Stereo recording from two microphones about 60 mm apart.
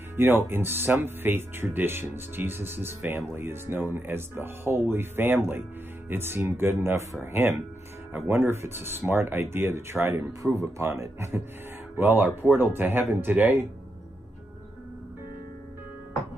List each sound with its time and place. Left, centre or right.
0.1 s speech: right
10.4 s a man's voice: right
12.0 s speech: right